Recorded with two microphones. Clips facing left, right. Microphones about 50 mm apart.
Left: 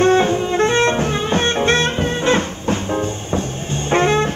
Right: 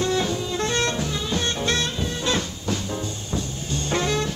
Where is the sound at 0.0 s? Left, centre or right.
Left.